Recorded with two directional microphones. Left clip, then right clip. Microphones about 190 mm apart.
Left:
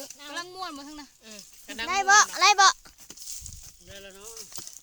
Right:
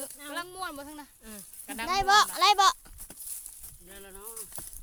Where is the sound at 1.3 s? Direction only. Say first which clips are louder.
Left 1 dB; 60° right (ahead or behind).